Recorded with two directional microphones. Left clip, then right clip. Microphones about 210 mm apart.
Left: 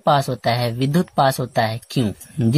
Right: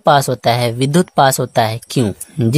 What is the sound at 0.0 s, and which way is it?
Speech, 35° right (ahead or behind).